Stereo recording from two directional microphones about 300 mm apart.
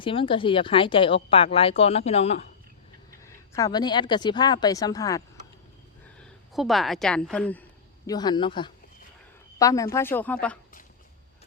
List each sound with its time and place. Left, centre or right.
0.0 s speech: centre
3.2 s speech: centre
6.5 s a woman's voice: centre